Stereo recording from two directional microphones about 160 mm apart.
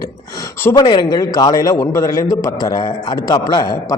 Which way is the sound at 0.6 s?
20° left (ahead or behind).